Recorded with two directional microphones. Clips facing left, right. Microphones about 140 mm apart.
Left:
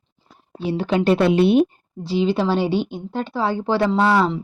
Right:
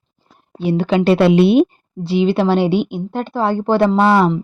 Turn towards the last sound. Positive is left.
turn(degrees=-55)  # may be behind; listen again after turning